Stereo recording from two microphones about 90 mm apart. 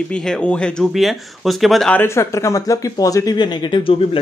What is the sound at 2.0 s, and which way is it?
Speech, 30° left (ahead or behind).